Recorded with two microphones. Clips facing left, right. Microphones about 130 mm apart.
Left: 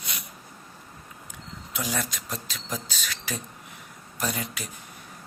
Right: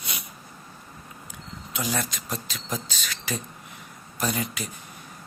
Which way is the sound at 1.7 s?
Centre (ahead or behind).